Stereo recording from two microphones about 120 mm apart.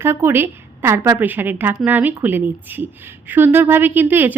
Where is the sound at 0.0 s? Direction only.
20° right (ahead or behind).